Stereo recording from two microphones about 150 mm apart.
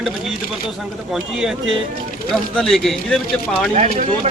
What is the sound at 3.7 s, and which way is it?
Speech, 50° right (ahead or behind).